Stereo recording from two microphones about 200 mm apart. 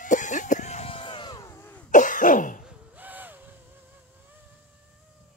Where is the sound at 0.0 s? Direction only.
40° left (ahead or behind); by 1.9 s 10° left (ahead or behind).